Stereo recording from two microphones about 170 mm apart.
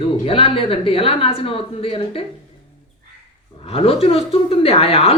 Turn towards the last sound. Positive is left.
turn(degrees=35)  # may be behind; listen again after turning